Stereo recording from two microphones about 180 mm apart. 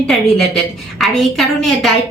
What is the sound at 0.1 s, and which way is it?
A woman's voice, centre (ahead or behind).